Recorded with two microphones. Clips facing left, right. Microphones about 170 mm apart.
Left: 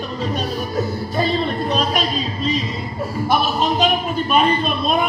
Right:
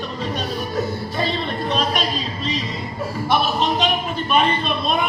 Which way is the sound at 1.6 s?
Centre (ahead or behind).